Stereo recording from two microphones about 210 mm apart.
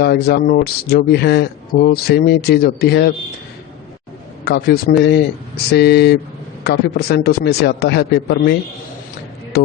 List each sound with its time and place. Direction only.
0.0 s speech: 50° left (ahead or behind)
4.5 s speech: 50° left (ahead or behind)